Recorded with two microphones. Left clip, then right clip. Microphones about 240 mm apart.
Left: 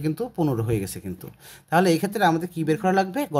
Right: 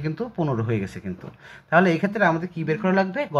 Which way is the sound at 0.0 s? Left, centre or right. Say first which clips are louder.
Left 2 dB; left.